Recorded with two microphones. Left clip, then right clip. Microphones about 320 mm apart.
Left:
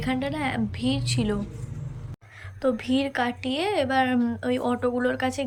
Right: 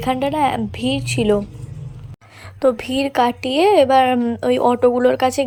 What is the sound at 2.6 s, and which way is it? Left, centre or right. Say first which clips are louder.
A woman's voice: right 7 dB; centre.